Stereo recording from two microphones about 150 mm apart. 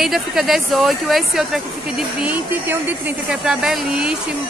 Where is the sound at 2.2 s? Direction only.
10° right (ahead or behind).